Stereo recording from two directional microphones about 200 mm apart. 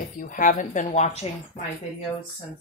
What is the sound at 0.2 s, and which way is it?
Speech, 40° left (ahead or behind).